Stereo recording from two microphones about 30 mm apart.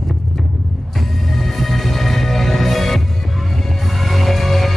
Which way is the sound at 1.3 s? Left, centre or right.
Centre.